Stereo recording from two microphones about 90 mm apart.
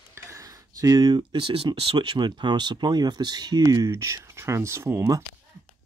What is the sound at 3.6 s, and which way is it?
Speech, 40° right (ahead or behind).